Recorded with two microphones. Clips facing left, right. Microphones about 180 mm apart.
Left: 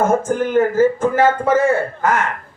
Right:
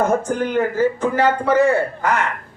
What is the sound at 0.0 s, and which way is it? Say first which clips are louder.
A man's voice: left 2 dB; 50° left (ahead or behind).